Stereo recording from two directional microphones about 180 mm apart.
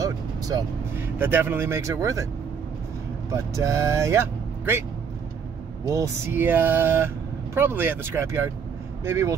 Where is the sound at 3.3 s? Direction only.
15° right (ahead or behind).